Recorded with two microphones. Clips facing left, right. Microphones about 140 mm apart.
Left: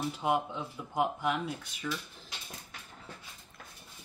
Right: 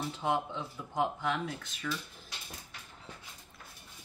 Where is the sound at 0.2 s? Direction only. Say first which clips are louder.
Left 1 dB; 10° left (ahead or behind).